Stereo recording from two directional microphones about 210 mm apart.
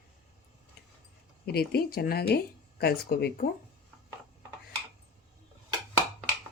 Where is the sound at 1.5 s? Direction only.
45° left (ahead or behind).